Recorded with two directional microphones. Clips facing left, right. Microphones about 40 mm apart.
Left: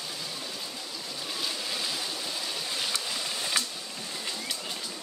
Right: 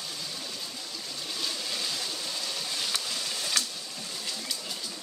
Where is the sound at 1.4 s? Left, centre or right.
Centre.